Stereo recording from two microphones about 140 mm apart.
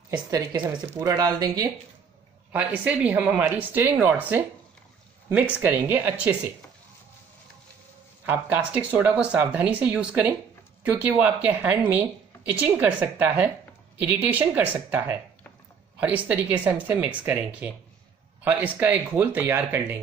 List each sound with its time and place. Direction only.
0.3 s speech: 25° right (ahead or behind)
2.5 s speech: 10° right (ahead or behind)
8.3 s speech: 10° right (ahead or behind)